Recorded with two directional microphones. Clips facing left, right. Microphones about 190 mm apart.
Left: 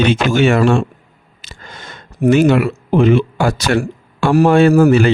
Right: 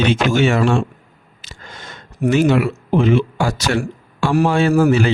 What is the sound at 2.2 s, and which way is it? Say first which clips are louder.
Speech: left 3 dB; 60° left (ahead or behind).